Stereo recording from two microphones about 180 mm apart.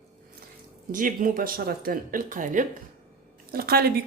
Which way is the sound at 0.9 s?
50° right (ahead or behind).